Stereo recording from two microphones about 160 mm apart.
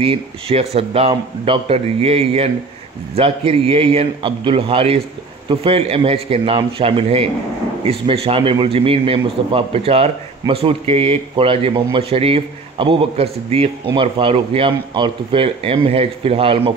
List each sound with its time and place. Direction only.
0.0 s a man's voice: 35° right (ahead or behind)